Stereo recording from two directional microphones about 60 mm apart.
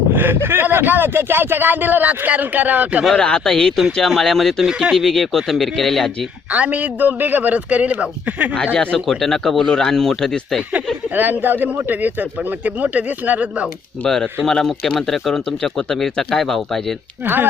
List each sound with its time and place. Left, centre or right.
0.1 s speech: right
3.2 s speech: centre
4.6 s speech: centre
5.0 s speech: centre
6.5 s a man's voice: right
8.5 s speech: centre
9.0 s speech: centre
11.1 s a man's voice: right
14.0 s speech: centre
17.2 s speech: right